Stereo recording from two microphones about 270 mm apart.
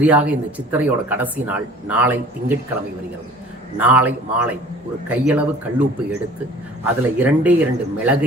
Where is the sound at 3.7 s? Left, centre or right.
Centre.